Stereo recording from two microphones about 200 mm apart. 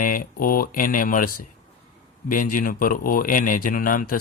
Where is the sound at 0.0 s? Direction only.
45° left (ahead or behind).